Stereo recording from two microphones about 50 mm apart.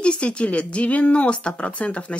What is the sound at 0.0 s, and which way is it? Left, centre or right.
Speech, left.